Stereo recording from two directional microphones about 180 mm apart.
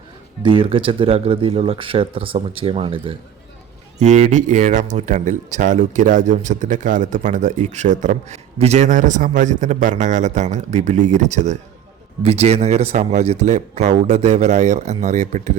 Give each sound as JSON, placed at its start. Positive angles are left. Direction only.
{"t": 0.4, "sound": "speech", "side_deg": -30}
{"t": 4.0, "sound": "speech", "side_deg": -40}